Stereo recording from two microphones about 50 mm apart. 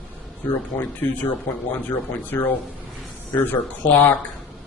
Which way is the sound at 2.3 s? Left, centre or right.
Left.